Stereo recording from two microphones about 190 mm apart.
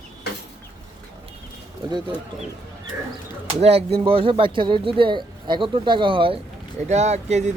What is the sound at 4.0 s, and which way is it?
Speech, 30° right (ahead or behind).